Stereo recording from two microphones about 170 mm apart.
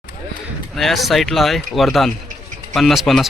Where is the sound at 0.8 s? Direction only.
Centre (ahead or behind).